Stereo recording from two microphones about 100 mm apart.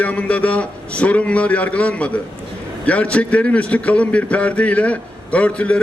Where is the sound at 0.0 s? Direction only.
15° left (ahead or behind).